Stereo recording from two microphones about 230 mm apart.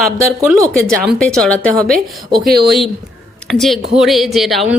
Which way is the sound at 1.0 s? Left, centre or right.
Centre.